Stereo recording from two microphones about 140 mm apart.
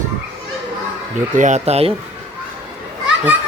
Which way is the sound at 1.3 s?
60° right (ahead or behind).